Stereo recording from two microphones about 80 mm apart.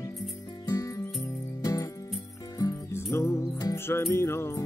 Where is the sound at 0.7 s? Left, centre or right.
Left.